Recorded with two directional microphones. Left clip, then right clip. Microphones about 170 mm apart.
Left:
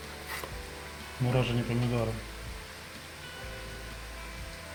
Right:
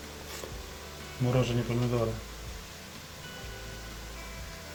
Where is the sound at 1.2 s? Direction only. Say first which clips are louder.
Right 1 dB; 5° left (ahead or behind).